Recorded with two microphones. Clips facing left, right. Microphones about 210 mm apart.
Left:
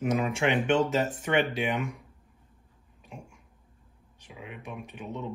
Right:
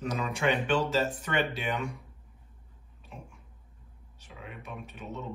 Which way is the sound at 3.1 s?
15° left (ahead or behind).